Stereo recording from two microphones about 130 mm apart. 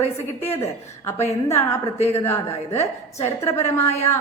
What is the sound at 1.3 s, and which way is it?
A woman's voice, 20° left (ahead or behind).